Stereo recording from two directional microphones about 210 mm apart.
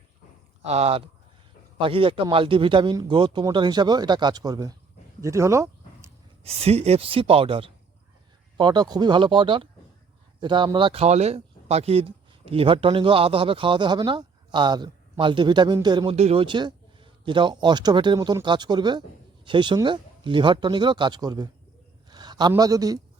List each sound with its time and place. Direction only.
0.6 s speech: 30° right (ahead or behind); by 6.1 s 15° right (ahead or behind)
6.4 s a man's voice: 30° right (ahead or behind)